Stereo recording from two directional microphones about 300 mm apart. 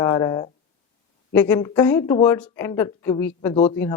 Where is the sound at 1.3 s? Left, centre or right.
Centre.